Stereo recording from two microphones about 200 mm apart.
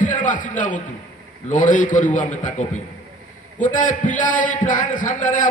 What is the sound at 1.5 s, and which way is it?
A man's voice, 40° left (ahead or behind).